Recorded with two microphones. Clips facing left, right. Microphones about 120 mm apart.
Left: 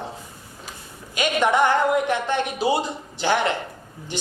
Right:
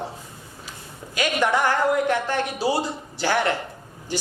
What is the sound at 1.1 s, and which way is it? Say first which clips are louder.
A man's voice: left 2 dB; 20° left (ahead or behind).